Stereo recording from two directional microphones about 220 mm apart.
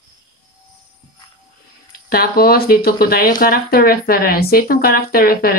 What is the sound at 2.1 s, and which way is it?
Speech, 45° left (ahead or behind).